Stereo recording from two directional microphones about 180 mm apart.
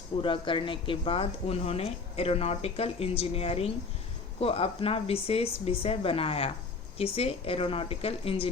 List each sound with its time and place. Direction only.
0.2 s speech: 25° left (ahead or behind)